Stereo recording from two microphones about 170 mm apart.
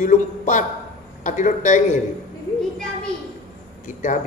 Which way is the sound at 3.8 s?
50° left (ahead or behind).